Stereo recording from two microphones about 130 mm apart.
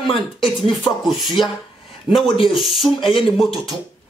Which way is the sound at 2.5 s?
Centre (ahead or behind).